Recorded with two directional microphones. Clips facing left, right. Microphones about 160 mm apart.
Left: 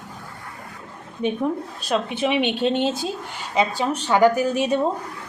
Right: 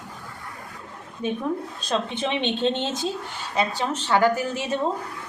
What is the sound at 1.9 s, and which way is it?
A woman's voice, 10° left (ahead or behind).